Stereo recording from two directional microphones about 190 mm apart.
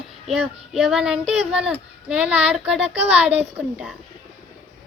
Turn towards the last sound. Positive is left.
turn(degrees=-5)  # may be behind; listen again after turning